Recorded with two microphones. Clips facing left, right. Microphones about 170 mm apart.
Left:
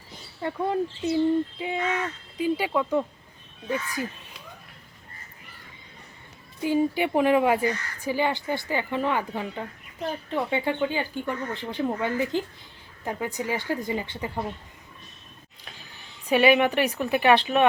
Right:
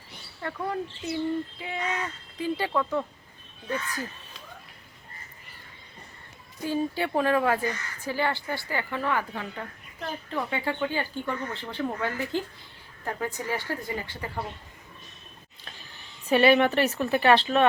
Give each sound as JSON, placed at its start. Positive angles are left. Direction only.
{"t": 0.4, "sound": "speech", "side_deg": 20}
{"t": 6.6, "sound": "speech", "side_deg": 15}
{"t": 16.3, "sound": "speech", "side_deg": 10}